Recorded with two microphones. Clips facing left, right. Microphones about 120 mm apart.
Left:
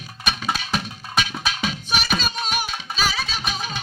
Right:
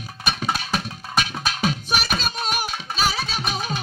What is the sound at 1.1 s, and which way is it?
Music, 45° right (ahead or behind).